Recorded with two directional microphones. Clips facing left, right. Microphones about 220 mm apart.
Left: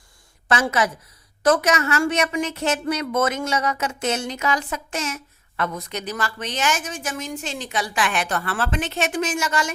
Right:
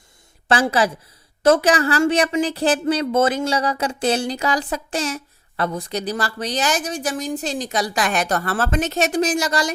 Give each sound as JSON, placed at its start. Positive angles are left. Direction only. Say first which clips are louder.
{"t": 0.4, "sound": "a woman's voice", "louder": "right 3 dB", "side_deg": -30}